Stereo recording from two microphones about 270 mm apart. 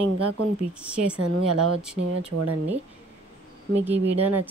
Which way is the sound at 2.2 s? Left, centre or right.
Right.